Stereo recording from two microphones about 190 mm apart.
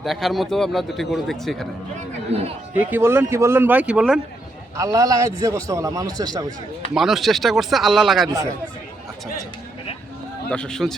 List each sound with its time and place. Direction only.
0.0 s a man's voice: centre (ahead or behind)
2.7 s speech: 10° right (ahead or behind)
4.8 s speech: 20° right (ahead or behind)
6.9 s a man's voice: centre (ahead or behind)
8.3 s speech: 20° right (ahead or behind)
10.5 s a man's voice: 5° left (ahead or behind)